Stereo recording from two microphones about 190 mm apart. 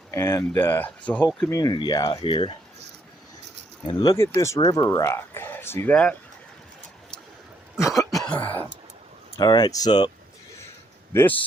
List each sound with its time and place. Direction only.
0.1 s speech: 15° left (ahead or behind)
1.5 s speech: 20° left (ahead or behind)
3.8 s speech: 20° left (ahead or behind)
7.8 s cough: centre (ahead or behind)
9.3 s speech: 20° left (ahead or behind)
11.1 s speech: 10° left (ahead or behind)